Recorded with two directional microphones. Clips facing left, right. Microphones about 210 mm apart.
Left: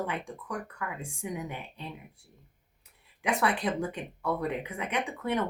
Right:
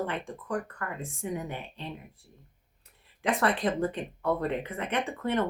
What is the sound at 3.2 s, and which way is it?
Speech, 15° left (ahead or behind).